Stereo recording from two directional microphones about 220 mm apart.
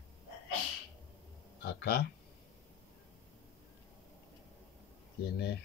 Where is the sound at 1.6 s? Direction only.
50° left (ahead or behind).